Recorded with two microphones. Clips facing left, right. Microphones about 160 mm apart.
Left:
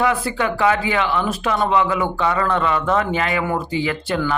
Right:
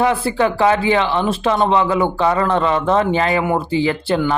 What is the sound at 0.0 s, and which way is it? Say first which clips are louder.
Speech: right 4 dB; 30° right (ahead or behind).